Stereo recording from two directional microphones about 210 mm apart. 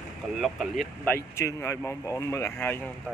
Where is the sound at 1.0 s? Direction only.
10° left (ahead or behind).